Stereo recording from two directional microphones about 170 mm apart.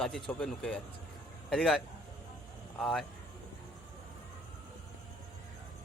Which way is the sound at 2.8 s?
Centre (ahead or behind).